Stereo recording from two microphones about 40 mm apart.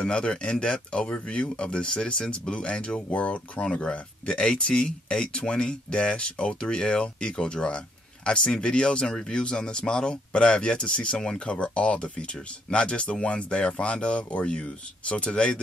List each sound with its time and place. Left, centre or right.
0.0 s speech: left
3.1 s speech: left